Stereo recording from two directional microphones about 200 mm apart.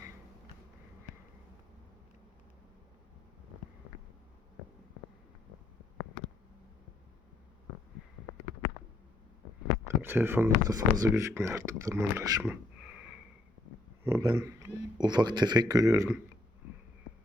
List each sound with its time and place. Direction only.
9.9 s speech: 10° right (ahead or behind)